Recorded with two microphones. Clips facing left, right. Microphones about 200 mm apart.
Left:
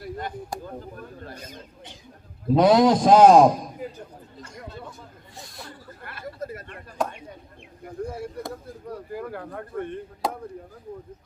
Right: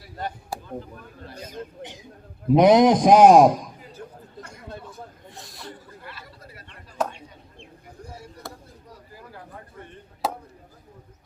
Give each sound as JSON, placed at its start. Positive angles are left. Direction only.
{"t": 0.5, "sound": "a man's voice", "side_deg": -5}
{"t": 2.5, "sound": "a man's voice", "side_deg": -20}
{"t": 5.4, "sound": "chuckle", "side_deg": 0}
{"t": 6.0, "sound": "a sound", "side_deg": 55}
{"t": 8.0, "sound": "a sound", "side_deg": 55}
{"t": 8.9, "sound": "speech", "side_deg": 60}
{"t": 10.2, "sound": "speech", "side_deg": -5}